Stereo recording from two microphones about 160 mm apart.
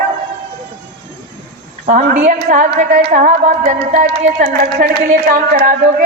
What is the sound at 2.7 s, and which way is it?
A man's voice, 65° right (ahead or behind).